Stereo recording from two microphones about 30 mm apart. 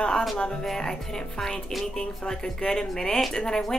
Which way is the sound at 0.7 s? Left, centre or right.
Centre.